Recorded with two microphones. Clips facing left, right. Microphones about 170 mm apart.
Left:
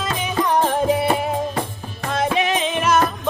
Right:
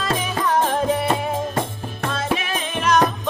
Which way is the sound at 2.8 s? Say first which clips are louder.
Right 1 dB; 5° left (ahead or behind).